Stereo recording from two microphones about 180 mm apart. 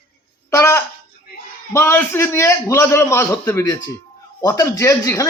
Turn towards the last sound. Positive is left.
turn(degrees=15)  # may be behind; listen again after turning